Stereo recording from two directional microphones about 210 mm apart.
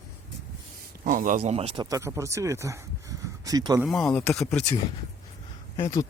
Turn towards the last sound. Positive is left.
turn(degrees=15)  # may be behind; listen again after turning